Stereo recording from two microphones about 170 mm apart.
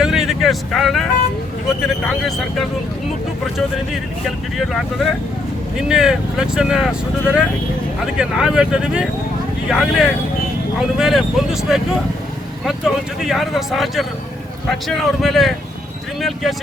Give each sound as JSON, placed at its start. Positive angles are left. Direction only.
{"t": 0.0, "sound": "vehicle", "side_deg": 0}
{"t": 1.8, "sound": "speech", "side_deg": 0}
{"t": 4.5, "sound": "speech", "side_deg": 0}
{"t": 5.9, "sound": "speech", "side_deg": -5}